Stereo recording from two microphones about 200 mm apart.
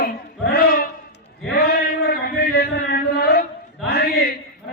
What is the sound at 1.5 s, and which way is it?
Chant, 50° left (ahead or behind).